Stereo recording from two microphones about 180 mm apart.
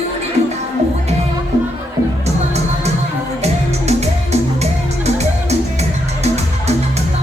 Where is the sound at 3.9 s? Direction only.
35° right (ahead or behind).